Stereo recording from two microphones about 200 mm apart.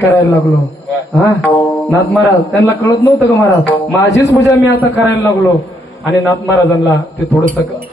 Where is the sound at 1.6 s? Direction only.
5° left (ahead or behind).